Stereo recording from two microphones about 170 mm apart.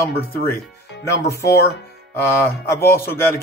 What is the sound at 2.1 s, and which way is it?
Speech, 15° left (ahead or behind).